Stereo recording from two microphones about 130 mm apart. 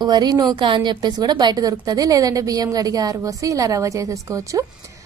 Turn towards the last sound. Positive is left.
turn(degrees=-25)  # may be behind; listen again after turning